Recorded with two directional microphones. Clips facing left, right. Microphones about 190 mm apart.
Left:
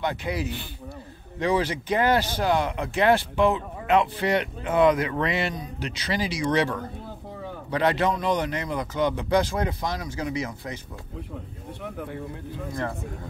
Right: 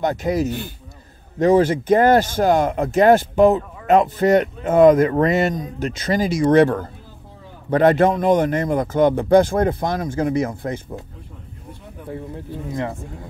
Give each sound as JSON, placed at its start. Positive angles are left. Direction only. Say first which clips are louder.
{"t": 0.0, "sound": "speech", "louder": "right 8 dB", "side_deg": -45}